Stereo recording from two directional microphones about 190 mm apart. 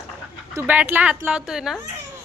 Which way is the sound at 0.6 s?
10° right (ahead or behind).